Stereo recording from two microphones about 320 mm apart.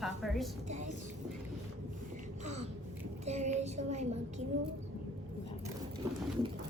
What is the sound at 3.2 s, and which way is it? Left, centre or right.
Child singing, right.